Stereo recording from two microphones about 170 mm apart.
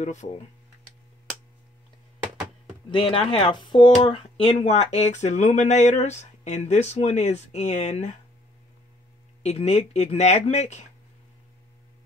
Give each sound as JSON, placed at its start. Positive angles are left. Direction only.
{"t": 0.0, "sound": "speech", "side_deg": 45}
{"t": 2.9, "sound": "speech", "side_deg": 30}
{"t": 9.4, "sound": "speech", "side_deg": 40}